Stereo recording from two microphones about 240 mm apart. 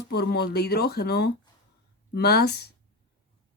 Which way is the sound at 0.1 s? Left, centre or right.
Left.